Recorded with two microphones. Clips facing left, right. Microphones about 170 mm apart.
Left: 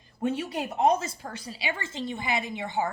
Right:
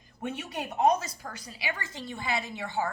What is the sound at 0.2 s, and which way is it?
A woman's voice, 30° left (ahead or behind).